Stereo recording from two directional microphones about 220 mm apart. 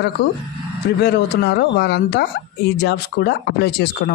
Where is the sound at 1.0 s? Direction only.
50° left (ahead or behind).